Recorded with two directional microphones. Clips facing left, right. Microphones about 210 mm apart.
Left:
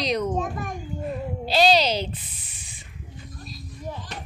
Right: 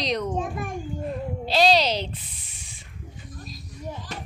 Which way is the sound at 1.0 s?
Centre (ahead or behind).